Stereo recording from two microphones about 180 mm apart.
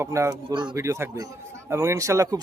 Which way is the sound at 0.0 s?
15° right (ahead or behind).